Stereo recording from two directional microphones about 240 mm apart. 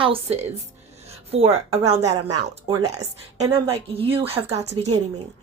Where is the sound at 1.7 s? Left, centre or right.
Right.